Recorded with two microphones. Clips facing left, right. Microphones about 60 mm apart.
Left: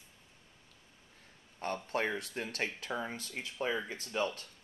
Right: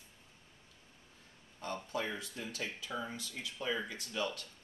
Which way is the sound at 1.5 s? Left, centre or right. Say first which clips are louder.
Left 4 dB; left.